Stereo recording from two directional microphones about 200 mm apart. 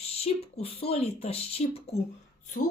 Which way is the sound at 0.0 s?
30° left (ahead or behind).